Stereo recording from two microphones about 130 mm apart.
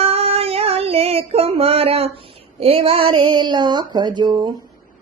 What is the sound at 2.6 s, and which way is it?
Speech, 50° right (ahead or behind).